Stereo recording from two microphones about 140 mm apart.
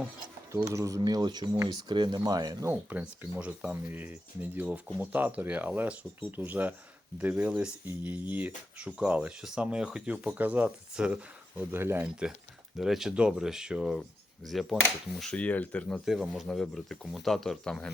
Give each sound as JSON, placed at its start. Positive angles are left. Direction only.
{"t": 0.7, "sound": "speech", "side_deg": -20}
{"t": 2.6, "sound": "speech", "side_deg": -10}
{"t": 12.7, "sound": "speech", "side_deg": 0}
{"t": 16.0, "sound": "speech", "side_deg": -5}